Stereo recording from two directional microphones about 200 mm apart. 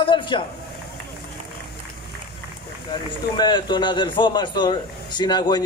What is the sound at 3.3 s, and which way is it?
A man's voice, 20° left (ahead or behind).